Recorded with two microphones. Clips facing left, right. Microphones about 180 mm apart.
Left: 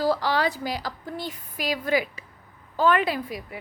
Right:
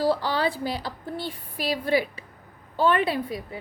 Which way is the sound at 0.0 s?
30° right (ahead or behind).